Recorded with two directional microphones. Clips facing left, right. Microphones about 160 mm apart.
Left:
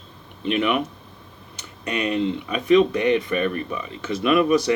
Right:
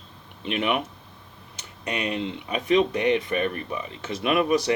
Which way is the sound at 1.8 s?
20° right (ahead or behind).